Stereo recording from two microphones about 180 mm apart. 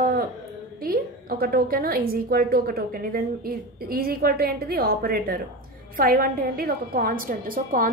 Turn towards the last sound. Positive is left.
turn(degrees=-50)  # may be behind; listen again after turning